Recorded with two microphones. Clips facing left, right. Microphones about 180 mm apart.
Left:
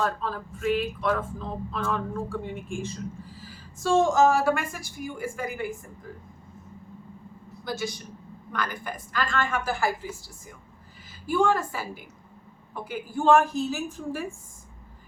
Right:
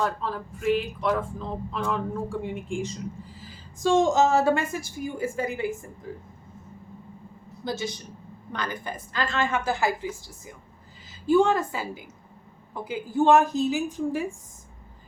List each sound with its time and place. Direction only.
0.0 s a woman's voice: 15° right (ahead or behind)
7.6 s a woman's voice: 25° right (ahead or behind)
11.3 s a woman's voice: 20° right (ahead or behind)
13.1 s a woman's voice: 20° right (ahead or behind)